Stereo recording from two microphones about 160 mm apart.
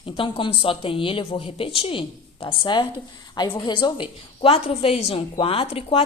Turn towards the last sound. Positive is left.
turn(degrees=35)  # may be behind; listen again after turning